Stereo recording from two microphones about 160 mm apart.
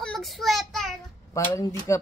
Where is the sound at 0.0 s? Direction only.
Centre (ahead or behind).